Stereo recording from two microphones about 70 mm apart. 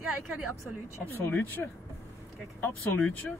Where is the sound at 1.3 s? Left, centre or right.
Left.